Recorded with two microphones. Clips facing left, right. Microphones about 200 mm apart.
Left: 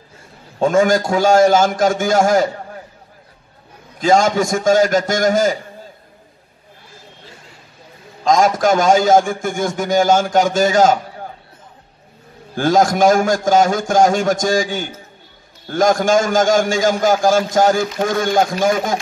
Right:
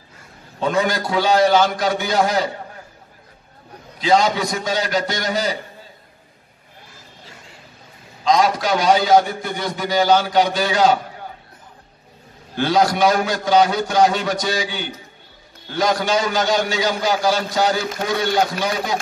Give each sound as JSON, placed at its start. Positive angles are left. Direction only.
{"t": 0.6, "sound": "a man's voice", "side_deg": 45}
{"t": 4.0, "sound": "a man's voice", "side_deg": 45}
{"t": 8.2, "sound": "a man's voice", "side_deg": 45}
{"t": 12.5, "sound": "a man's voice", "side_deg": 45}